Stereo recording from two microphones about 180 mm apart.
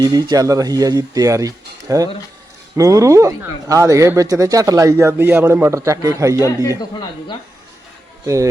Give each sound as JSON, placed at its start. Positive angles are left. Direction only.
{"t": 0.0, "sound": "speech", "side_deg": -20}
{"t": 6.7, "sound": "speech", "side_deg": 25}